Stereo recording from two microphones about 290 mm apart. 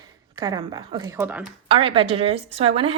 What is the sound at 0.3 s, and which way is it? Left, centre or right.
Speech, centre.